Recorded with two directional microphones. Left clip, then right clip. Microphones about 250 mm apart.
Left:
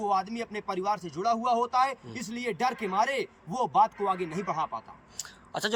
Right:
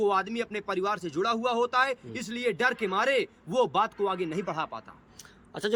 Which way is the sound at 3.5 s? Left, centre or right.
Right.